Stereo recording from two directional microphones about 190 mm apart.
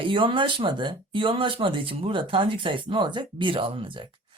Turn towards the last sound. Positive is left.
turn(degrees=-25)  # may be behind; listen again after turning